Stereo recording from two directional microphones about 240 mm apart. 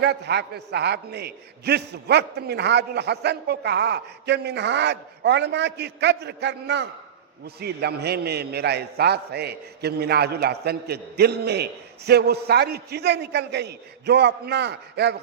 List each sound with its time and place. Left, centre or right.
0.0 s a man's voice: right